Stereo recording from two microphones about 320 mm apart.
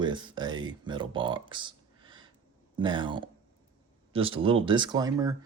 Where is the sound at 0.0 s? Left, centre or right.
Centre.